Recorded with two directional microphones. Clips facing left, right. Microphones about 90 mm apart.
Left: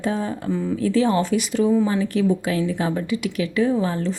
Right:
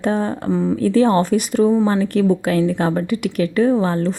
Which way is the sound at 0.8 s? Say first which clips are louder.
Right 4 dB; 50° right (ahead or behind).